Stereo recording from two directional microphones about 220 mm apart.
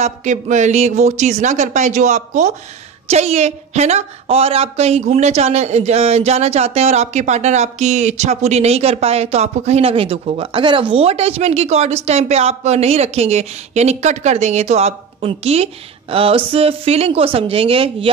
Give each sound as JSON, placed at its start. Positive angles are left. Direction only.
{"t": 0.0, "sound": "a woman's voice", "side_deg": -30}